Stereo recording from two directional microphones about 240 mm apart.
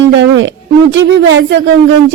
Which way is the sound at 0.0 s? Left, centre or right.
Right.